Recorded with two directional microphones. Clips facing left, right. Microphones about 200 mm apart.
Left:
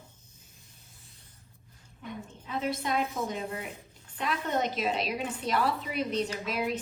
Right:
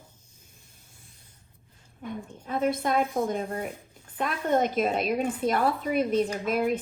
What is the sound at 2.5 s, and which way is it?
A woman's voice, 50° right (ahead or behind).